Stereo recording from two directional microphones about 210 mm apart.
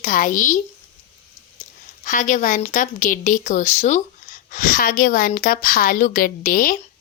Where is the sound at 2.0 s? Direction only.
35° left (ahead or behind).